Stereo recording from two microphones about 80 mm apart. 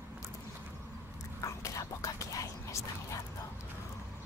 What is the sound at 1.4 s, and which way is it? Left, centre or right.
Whispering, left.